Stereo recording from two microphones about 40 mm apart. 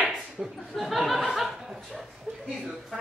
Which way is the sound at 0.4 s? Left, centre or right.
Right.